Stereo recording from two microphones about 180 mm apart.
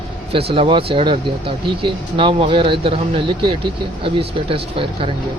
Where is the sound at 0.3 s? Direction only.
30° right (ahead or behind).